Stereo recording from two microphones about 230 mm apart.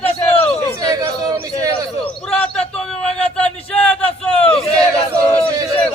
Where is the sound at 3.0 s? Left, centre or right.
Centre.